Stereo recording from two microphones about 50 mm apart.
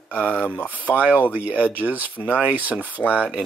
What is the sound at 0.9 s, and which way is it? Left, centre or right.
Speech, right.